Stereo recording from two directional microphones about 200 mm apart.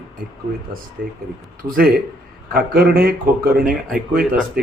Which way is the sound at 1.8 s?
50° right (ahead or behind).